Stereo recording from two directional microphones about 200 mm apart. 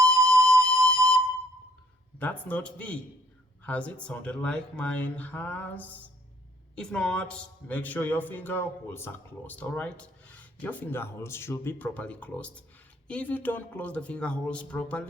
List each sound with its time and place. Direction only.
0.1 s flute: 5° left (ahead or behind)
2.1 s a man's voice: 5° left (ahead or behind)